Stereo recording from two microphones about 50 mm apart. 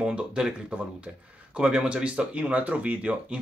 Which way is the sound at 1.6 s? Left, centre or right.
Centre.